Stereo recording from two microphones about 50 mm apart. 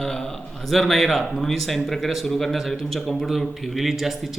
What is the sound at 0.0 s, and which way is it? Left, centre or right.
A man's voice, centre.